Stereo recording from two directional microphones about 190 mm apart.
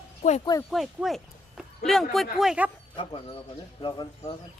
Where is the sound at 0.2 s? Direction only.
35° left (ahead or behind).